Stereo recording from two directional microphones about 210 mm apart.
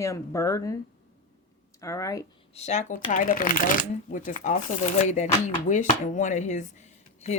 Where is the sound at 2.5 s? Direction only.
30° left (ahead or behind).